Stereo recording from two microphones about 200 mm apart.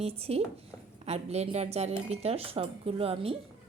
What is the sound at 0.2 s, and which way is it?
Speech, 30° right (ahead or behind).